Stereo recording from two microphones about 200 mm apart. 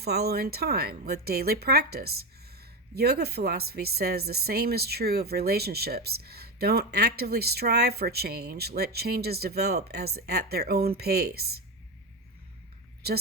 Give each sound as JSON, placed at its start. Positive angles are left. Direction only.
{"t": 0.0, "sound": "speech", "side_deg": -50}